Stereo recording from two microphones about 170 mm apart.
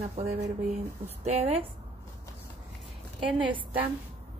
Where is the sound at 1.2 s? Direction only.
35° right (ahead or behind).